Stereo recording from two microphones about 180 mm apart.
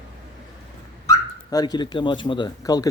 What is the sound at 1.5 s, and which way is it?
Speech, 20° left (ahead or behind).